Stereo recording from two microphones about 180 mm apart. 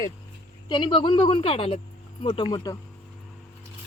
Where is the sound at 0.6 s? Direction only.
25° left (ahead or behind).